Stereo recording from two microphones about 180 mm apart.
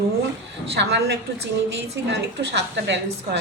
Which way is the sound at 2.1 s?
80° right.